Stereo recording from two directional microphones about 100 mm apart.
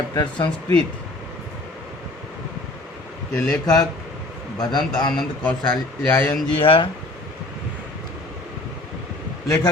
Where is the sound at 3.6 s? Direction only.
40° left (ahead or behind).